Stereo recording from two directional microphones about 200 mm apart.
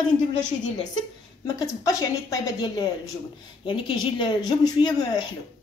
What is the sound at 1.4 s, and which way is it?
A woman's voice, 15° left (ahead or behind).